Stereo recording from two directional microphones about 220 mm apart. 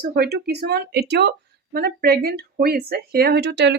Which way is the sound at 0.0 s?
45° right (ahead or behind).